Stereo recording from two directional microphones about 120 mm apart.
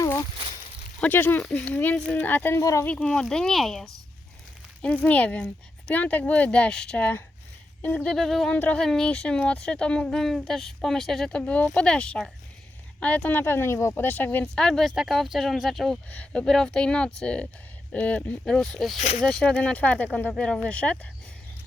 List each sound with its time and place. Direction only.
0.0 s a sound: 30° left (ahead or behind)
1.0 s speech: 15° left (ahead or behind)
2.8 s speech: 10° left (ahead or behind)
8.5 s speech: 15° left (ahead or behind)
8.8 s speech: 5° left (ahead or behind)
14.4 s speech: 5° left (ahead or behind)
16.0 s speech: 10° left (ahead or behind)
18.9 s speech: 70° left (ahead or behind)
19.2 s speech: 10° left (ahead or behind)